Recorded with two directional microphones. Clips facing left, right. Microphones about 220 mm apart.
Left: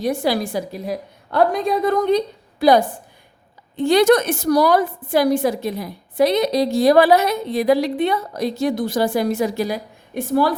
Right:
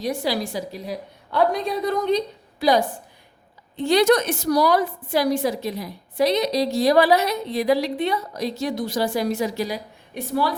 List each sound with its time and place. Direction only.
0.0 s a woman's voice: 55° left (ahead or behind)